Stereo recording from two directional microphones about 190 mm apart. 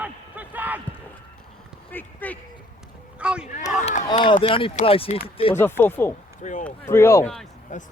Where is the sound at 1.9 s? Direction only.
10° left (ahead or behind).